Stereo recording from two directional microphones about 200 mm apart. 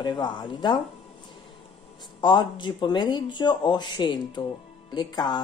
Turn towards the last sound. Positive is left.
turn(degrees=20)  # may be behind; listen again after turning